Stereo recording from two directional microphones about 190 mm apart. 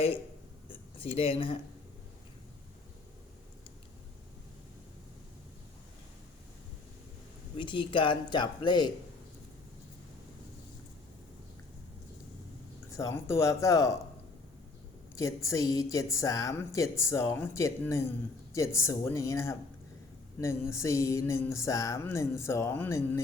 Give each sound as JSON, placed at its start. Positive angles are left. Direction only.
{"t": 0.7, "sound": "speech", "side_deg": 30}
{"t": 7.5, "sound": "speech", "side_deg": 25}
{"t": 12.9, "sound": "music", "side_deg": 15}
{"t": 15.4, "sound": "music", "side_deg": 15}